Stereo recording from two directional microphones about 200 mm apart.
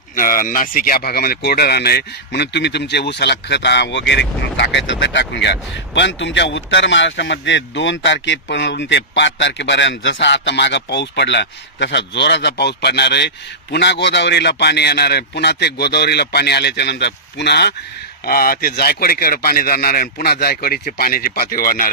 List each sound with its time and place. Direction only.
0.1 s a man's voice: 45° left (ahead or behind)